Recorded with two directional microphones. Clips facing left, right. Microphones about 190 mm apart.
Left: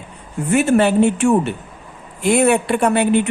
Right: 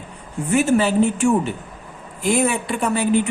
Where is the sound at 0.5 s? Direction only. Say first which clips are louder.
Left 3 dB; 65° left (ahead or behind).